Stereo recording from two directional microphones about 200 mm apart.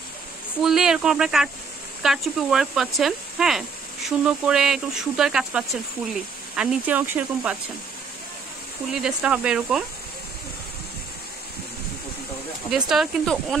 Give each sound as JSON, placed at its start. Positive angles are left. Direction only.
{"t": 0.6, "sound": "speech", "side_deg": 0}
{"t": 8.9, "sound": "speech", "side_deg": -5}
{"t": 12.6, "sound": "speech", "side_deg": -5}